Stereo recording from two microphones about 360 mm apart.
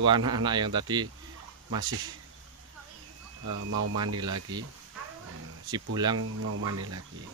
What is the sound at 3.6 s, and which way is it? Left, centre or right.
Speech, right.